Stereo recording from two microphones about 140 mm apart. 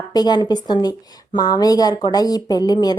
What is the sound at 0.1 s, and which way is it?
Speech, 30° left (ahead or behind).